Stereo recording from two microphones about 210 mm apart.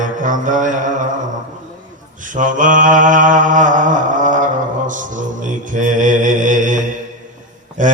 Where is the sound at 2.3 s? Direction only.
40° right (ahead or behind).